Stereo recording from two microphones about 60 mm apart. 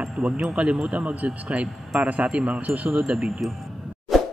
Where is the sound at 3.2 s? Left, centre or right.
Centre.